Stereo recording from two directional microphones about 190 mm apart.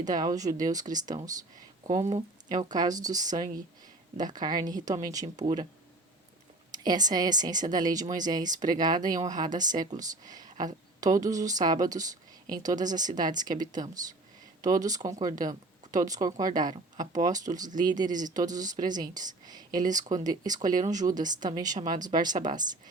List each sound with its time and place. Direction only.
0.0 s speech: 20° right (ahead or behind)
2.5 s speech: 20° right (ahead or behind)
6.7 s a woman's voice: 20° right (ahead or behind)
17.0 s speech: 40° right (ahead or behind)
17.2 s speech: 20° right (ahead or behind)